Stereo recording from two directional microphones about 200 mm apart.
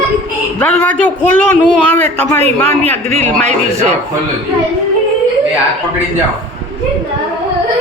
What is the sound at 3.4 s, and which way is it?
Speech, 35° right (ahead or behind).